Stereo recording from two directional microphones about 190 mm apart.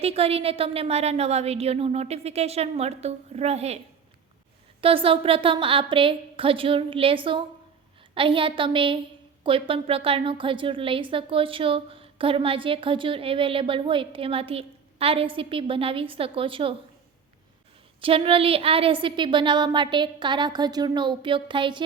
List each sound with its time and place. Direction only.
0.0 s a woman's voice: 30° right (ahead or behind)
4.8 s a woman's voice: 30° right (ahead or behind)
18.0 s a woman's voice: 30° right (ahead or behind)